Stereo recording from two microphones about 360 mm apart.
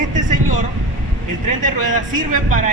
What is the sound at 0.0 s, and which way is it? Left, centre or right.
Vehicle, right.